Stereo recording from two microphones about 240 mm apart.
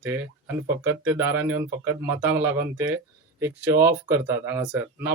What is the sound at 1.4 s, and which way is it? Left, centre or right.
Speech, right.